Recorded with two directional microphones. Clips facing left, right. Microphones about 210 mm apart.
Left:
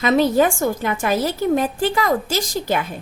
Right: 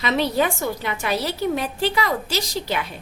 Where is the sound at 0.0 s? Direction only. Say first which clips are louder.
Left 5 dB; 45° left (ahead or behind).